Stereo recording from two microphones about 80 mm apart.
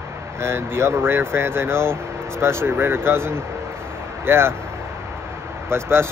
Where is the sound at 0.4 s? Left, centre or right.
Right.